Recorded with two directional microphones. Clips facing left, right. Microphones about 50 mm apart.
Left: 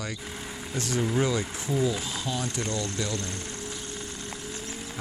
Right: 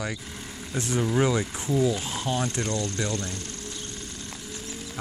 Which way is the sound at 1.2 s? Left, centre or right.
Centre.